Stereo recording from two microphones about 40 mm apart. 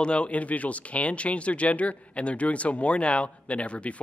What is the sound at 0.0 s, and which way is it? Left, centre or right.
Speech, left.